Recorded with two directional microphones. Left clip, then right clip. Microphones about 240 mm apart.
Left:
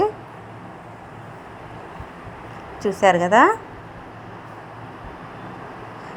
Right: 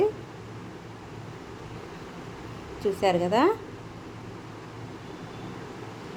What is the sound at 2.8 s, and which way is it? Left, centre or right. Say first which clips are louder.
Speech: left 8 dB; centre.